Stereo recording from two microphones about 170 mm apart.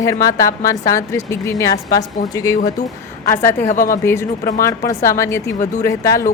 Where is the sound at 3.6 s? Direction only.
50° left (ahead or behind).